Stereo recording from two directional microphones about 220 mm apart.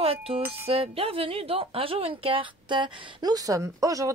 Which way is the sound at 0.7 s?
25° right (ahead or behind).